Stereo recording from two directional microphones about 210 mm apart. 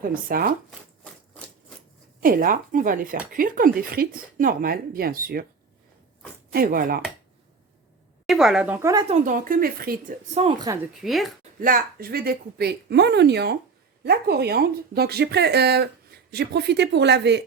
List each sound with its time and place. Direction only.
0.0 s speech: 40° right (ahead or behind)
0.7 s a sound: 5° left (ahead or behind)
2.2 s speech: 40° right (ahead or behind)
6.5 s speech: 45° right (ahead or behind)
8.3 s speech: centre (ahead or behind)
9.0 s speech: 35° right (ahead or behind)
11.0 s speech: centre (ahead or behind)
11.6 s speech: 45° right (ahead or behind)